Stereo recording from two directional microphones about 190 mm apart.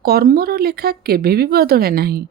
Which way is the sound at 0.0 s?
55° right (ahead or behind).